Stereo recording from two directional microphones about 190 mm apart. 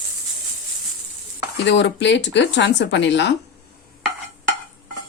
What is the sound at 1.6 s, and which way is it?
Speech, 70° left (ahead or behind).